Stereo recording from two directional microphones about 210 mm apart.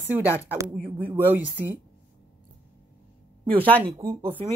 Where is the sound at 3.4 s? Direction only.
25° right (ahead or behind).